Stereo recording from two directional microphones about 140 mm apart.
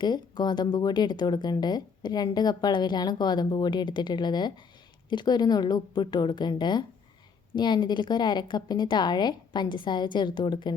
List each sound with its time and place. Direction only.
0.0 s speech: 30° left (ahead or behind)